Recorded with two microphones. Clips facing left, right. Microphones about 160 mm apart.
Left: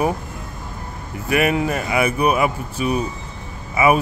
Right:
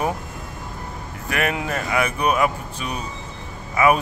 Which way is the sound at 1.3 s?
5° left (ahead or behind).